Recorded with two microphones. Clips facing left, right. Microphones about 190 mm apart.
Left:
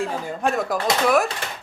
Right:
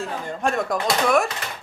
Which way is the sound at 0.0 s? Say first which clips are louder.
Left 2 dB; 5° left (ahead or behind).